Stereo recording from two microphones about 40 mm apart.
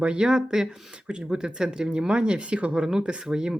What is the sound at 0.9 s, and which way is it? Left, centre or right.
Speech, right.